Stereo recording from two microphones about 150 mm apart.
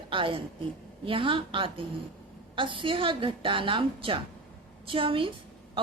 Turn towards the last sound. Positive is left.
turn(degrees=-35)  # may be behind; listen again after turning